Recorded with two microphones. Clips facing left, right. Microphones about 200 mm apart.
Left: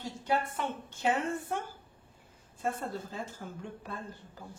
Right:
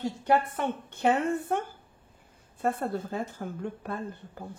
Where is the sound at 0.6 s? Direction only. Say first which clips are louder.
Right 5 dB; 60° right (ahead or behind).